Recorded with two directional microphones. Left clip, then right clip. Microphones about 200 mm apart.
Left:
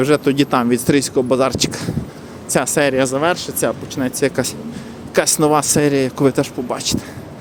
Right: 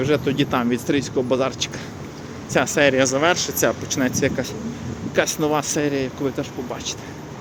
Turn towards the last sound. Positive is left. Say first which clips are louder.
# left 7 dB
turn(degrees=40)  # may be behind; listen again after turning